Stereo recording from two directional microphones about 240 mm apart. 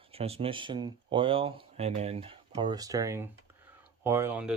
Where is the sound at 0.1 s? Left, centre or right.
Right.